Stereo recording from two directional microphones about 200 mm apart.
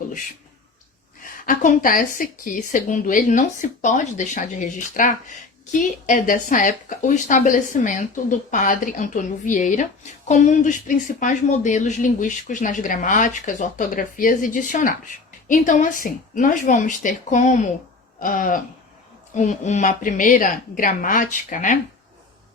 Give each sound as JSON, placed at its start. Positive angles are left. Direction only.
{"t": 1.2, "sound": "speech", "side_deg": 45}